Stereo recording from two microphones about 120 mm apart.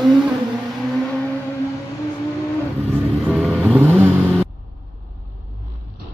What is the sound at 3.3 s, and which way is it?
Vehicle, 10° right (ahead or behind).